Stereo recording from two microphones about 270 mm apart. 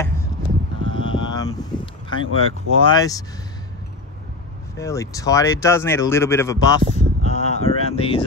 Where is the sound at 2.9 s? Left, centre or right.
Centre.